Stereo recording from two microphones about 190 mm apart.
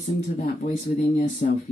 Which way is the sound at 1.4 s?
45° left (ahead or behind).